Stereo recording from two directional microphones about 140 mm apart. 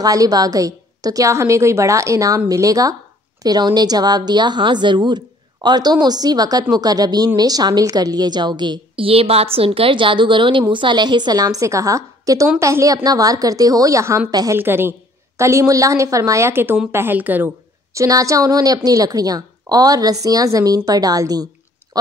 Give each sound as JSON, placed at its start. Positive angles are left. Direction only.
{"t": 0.0, "sound": "a woman's voice", "side_deg": -25}
{"t": 17.9, "sound": "a woman's voice", "side_deg": -25}